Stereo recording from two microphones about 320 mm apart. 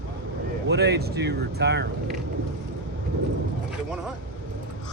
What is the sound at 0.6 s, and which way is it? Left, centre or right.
Speech, right.